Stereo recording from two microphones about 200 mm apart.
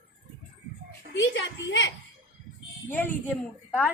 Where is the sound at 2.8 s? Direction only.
10° left (ahead or behind).